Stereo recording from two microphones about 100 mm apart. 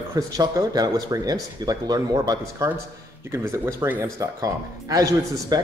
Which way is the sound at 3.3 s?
30° right (ahead or behind).